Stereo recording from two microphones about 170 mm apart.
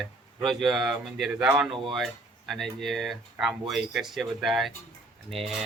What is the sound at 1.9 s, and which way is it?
Speech, centre (ahead or behind).